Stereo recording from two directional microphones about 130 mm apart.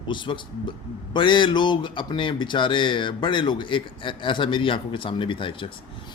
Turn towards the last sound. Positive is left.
turn(degrees=40)  # may be behind; listen again after turning